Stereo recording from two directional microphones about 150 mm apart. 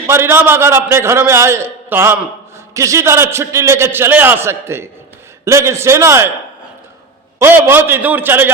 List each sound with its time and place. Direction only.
0.1 s a man's voice: 15° right (ahead or behind)
7.3 s a man's voice: 15° right (ahead or behind)